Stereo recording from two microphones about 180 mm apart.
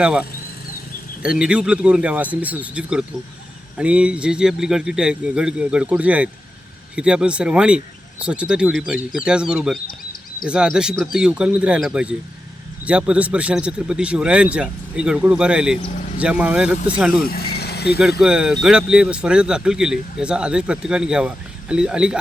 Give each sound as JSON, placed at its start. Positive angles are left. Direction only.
{"t": 0.0, "sound": "speech", "side_deg": -5}
{"t": 9.8, "sound": "a sound", "side_deg": 55}
{"t": 10.5, "sound": "speech", "side_deg": -5}
{"t": 17.1, "sound": "vehicle", "side_deg": 55}
{"t": 18.2, "sound": "speech", "side_deg": -5}